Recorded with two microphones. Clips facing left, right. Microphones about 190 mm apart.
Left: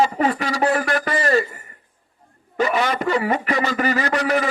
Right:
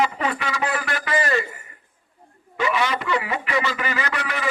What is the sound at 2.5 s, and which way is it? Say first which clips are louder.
A man's voice: left 3 dB; 40° left (ahead or behind).